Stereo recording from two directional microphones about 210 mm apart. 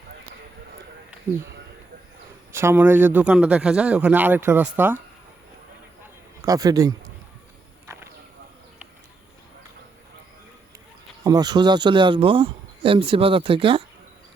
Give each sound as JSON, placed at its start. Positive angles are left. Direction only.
{"t": 2.5, "sound": "a man's voice", "side_deg": -10}
{"t": 6.4, "sound": "a man's voice", "side_deg": -15}
{"t": 11.2, "sound": "speech", "side_deg": -15}